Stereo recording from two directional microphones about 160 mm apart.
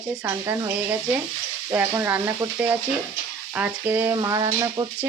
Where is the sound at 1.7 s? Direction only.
15° right (ahead or behind).